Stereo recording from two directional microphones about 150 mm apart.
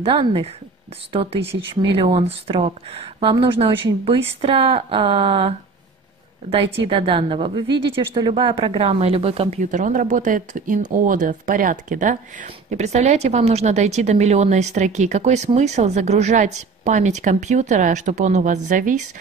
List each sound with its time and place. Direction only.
0.0 s speech: 35° right (ahead or behind)
6.9 s speech: 35° right (ahead or behind)
9.6 s speech: 55° right (ahead or behind)